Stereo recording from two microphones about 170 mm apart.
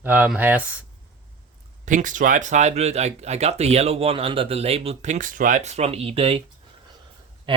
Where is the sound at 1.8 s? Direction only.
50° right (ahead or behind).